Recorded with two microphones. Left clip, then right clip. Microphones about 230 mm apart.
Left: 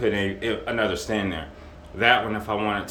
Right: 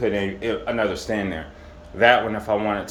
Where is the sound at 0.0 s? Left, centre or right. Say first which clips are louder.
Right 1 dB; centre.